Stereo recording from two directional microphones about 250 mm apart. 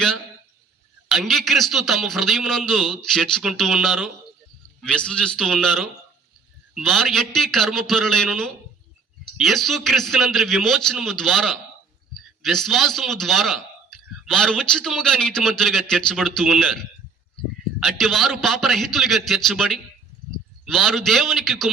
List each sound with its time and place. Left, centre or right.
1.0 s a man's voice: centre